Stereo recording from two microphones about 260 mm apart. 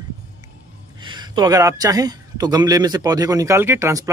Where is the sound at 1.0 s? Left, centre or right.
Centre.